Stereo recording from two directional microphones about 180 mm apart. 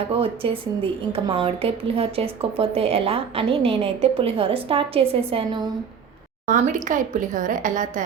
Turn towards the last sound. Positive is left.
turn(degrees=-45)  # may be behind; listen again after turning